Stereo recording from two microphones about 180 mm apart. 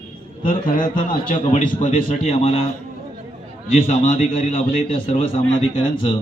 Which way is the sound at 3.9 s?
45° left (ahead or behind).